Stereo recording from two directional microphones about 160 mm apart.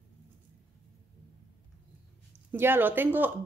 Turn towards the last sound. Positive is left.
turn(degrees=-10)  # may be behind; listen again after turning